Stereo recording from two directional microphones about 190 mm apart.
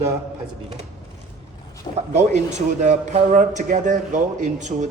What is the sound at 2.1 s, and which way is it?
A man's voice, 35° right (ahead or behind).